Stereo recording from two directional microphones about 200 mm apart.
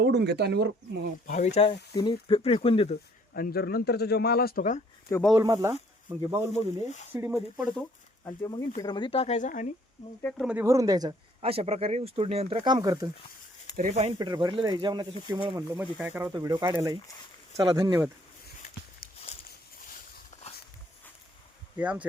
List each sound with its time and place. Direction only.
0.0 s speech: 55° right (ahead or behind)
1.3 s speech: 35° left (ahead or behind)
3.3 s speech: 50° left (ahead or behind)
5.3 s speech: 15° right (ahead or behind)
6.5 s speech: 35° left (ahead or behind)
7.1 s speech: 10° right (ahead or behind)
7.8 s speech: 10° left (ahead or behind); by 9.6 s 40° left (ahead or behind)
10.2 s speech: centre (ahead or behind); by 13.1 s 20° right (ahead or behind)
13.7 s speech: 40° right (ahead or behind)
14.2 s speech: 20° right (ahead or behind)
20.3 s walk: 35° left (ahead or behind)
21.8 s speech: 5° right (ahead or behind)